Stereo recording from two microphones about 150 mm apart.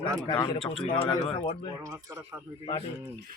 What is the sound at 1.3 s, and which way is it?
Speech, 35° left (ahead or behind).